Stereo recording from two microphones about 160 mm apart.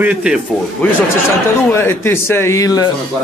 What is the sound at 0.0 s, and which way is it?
Speech, 5° right (ahead or behind).